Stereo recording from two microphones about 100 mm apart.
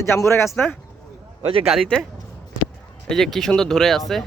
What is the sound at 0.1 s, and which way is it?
Speech, 25° left (ahead or behind).